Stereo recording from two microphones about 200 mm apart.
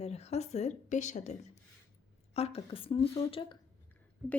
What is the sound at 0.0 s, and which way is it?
A woman's voice, 30° left (ahead or behind).